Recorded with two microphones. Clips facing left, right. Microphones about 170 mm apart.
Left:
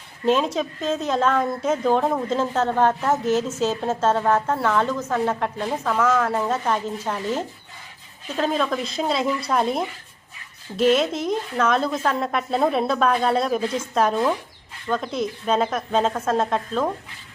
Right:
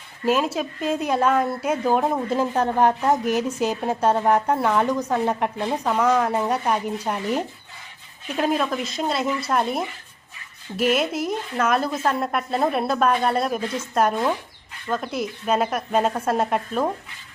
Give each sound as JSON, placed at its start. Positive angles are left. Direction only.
{"t": 0.3, "sound": "a woman's voice", "side_deg": -5}